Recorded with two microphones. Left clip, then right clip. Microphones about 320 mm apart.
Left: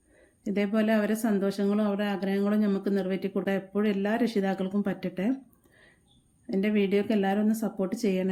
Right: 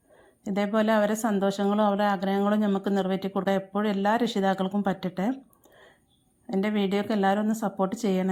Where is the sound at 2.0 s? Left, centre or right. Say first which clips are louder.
Right 6 dB; right.